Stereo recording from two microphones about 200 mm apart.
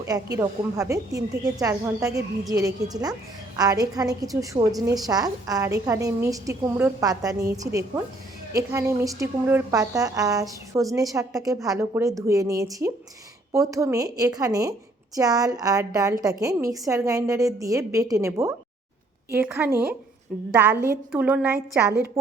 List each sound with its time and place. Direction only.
0.0 s a woman's voice: 15° right (ahead or behind)